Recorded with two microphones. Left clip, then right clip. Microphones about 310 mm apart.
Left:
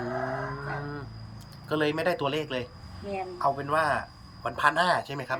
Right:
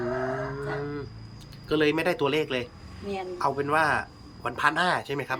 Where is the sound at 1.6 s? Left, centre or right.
Centre.